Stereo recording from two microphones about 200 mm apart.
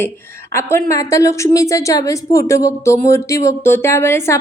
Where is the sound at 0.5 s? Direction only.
15° left (ahead or behind).